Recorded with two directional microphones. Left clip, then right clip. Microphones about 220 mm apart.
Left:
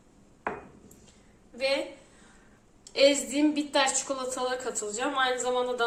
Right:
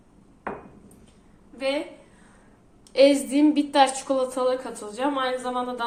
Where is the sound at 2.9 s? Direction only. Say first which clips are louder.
Right 5 dB; 30° right (ahead or behind).